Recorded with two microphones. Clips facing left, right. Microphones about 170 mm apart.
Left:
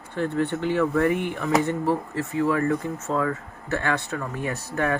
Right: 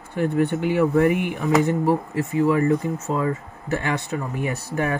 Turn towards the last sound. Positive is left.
turn(degrees=-10)  # may be behind; listen again after turning